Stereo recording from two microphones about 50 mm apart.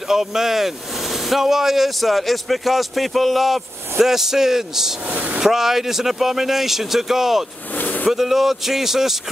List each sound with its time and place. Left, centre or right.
0.1 s a man's voice: centre
5.1 s speech: right
5.4 s speech: centre
7.7 s a sound: left
8.1 s speech: centre